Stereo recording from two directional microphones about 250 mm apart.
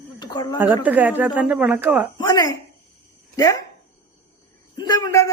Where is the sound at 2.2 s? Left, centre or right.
Centre.